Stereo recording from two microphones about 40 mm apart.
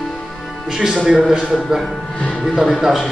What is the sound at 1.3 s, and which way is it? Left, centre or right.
Speech, centre.